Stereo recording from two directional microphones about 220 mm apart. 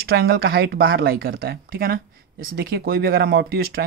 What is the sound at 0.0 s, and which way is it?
Speech, 45° right (ahead or behind).